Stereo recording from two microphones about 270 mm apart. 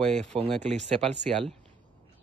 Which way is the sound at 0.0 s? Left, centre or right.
Centre.